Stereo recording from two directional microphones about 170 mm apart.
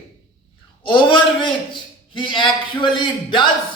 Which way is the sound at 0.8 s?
30° left (ahead or behind).